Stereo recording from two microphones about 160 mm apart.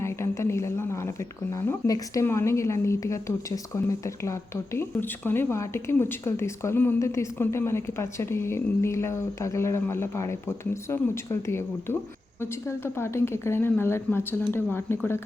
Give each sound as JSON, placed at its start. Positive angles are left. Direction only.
{"t": 0.0, "sound": "speech", "side_deg": 15}